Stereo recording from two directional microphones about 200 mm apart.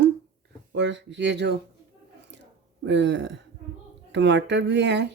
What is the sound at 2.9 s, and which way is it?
Speech, 65° right (ahead or behind).